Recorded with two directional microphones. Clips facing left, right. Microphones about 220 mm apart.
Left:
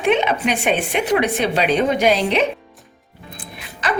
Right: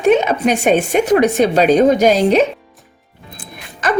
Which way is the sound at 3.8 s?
45° right (ahead or behind).